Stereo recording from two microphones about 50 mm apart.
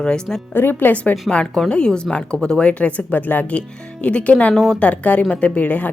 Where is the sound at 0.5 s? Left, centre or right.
Left.